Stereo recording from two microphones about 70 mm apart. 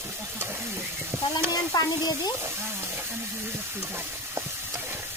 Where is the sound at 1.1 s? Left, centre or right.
Right.